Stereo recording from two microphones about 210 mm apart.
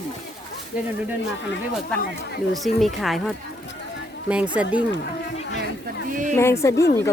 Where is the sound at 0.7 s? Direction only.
5° right (ahead or behind).